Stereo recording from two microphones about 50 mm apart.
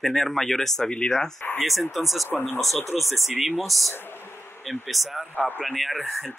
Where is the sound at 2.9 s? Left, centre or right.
Centre.